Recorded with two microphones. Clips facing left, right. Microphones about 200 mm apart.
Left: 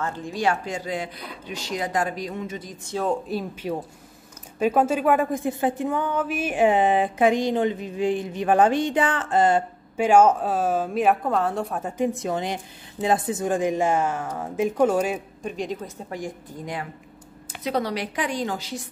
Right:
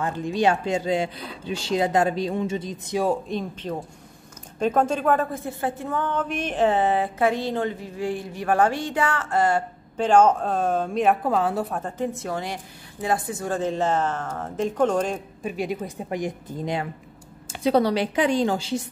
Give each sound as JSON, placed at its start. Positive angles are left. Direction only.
{"t": 0.0, "sound": "speech", "side_deg": -20}
{"t": 3.3, "sound": "a woman's voice", "side_deg": 5}
{"t": 10.0, "sound": "speech", "side_deg": 10}
{"t": 12.0, "sound": "a woman's voice", "side_deg": 15}
{"t": 15.4, "sound": "a woman's voice", "side_deg": -5}